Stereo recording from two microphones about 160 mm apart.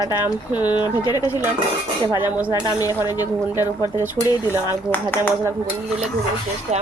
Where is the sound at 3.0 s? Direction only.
20° left (ahead or behind).